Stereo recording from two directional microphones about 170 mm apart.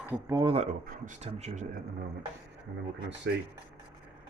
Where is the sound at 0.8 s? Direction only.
55° right (ahead or behind).